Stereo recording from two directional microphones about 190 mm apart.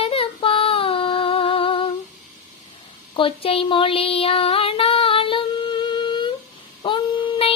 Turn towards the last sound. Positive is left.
turn(degrees=30)  # may be behind; listen again after turning